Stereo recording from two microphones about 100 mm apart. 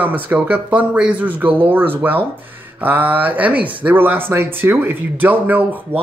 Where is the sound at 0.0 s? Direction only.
15° right (ahead or behind).